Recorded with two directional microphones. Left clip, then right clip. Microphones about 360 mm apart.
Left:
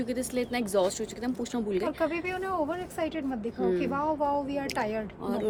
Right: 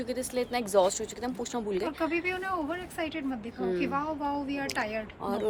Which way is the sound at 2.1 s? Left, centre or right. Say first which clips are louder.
Even; left.